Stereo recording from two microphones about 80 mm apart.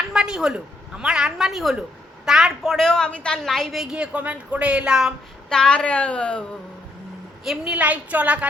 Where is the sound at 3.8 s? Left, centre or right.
Centre.